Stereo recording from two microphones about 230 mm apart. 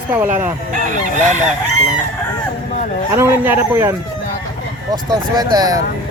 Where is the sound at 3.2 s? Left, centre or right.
Centre.